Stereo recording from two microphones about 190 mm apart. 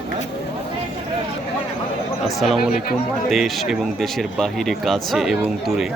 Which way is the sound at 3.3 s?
Centre (ahead or behind).